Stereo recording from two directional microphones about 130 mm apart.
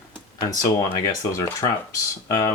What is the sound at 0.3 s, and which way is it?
Speech, 30° left (ahead or behind).